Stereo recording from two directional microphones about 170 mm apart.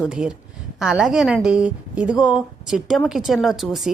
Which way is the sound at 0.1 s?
5° right (ahead or behind).